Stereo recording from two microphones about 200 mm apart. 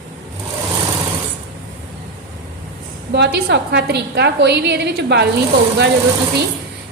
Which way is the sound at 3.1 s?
55° right (ahead or behind).